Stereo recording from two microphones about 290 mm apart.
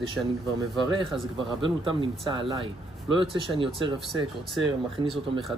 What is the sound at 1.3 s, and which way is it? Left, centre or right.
Speech, centre.